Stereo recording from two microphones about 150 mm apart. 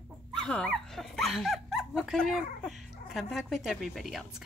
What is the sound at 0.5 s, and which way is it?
A woman's voice, 5° left (ahead or behind).